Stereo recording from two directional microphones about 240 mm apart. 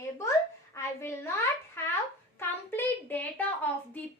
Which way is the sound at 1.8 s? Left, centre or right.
Centre.